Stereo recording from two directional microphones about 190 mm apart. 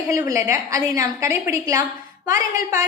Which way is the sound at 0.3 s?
15° right (ahead or behind).